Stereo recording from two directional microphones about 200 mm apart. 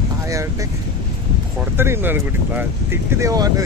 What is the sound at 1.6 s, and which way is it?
Speech, 10° right (ahead or behind).